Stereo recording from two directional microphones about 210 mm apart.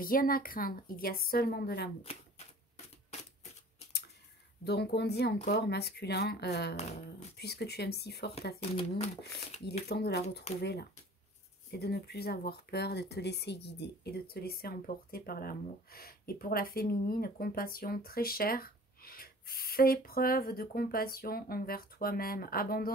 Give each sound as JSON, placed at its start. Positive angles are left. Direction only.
{"t": 0.0, "sound": "speech", "side_deg": 45}
{"t": 4.6, "sound": "speech", "side_deg": 50}
{"t": 8.5, "sound": "speech", "side_deg": 30}
{"t": 9.8, "sound": "speech", "side_deg": 50}